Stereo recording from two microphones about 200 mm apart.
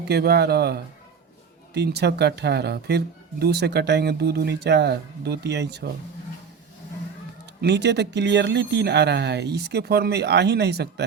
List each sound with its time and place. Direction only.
0.1 s speech: 55° right (ahead or behind)
7.6 s speech: 60° right (ahead or behind)